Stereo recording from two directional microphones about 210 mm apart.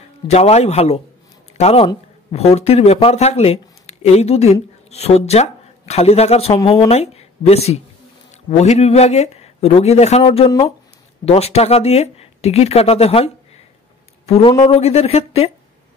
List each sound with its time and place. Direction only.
0.3 s a man's voice: 30° left (ahead or behind)